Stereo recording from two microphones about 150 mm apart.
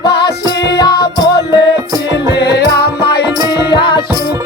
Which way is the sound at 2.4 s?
90° left.